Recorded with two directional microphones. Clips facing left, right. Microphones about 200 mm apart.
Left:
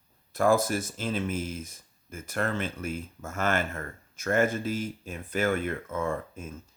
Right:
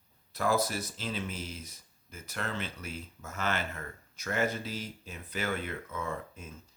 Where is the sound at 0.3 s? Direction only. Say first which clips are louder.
Left 6 dB; 50° left (ahead or behind).